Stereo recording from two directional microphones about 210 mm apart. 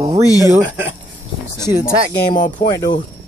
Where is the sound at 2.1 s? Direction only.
45° left (ahead or behind).